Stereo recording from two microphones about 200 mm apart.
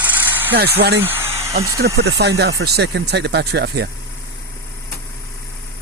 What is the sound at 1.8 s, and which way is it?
Speech, 65° right (ahead or behind).